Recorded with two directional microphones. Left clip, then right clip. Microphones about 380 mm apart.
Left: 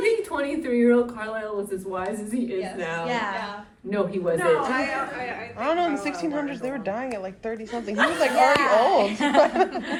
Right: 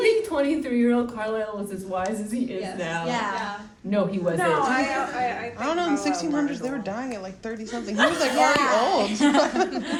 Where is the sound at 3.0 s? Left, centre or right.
Left.